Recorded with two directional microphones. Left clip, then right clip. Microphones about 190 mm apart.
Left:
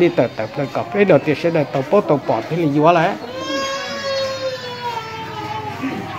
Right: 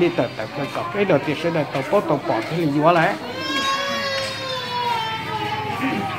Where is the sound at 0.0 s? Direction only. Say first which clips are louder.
Left 4 dB; 50° left (ahead or behind).